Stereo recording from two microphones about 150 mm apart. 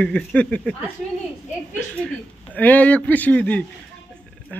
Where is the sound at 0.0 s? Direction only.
5° left (ahead or behind).